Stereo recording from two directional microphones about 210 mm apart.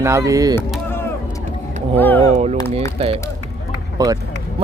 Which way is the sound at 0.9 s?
10° left (ahead or behind).